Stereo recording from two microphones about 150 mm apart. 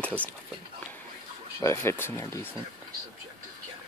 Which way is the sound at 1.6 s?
20° left (ahead or behind).